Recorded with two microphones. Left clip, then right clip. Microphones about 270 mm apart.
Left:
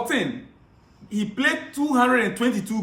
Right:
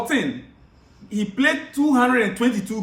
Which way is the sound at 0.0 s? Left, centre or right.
Centre.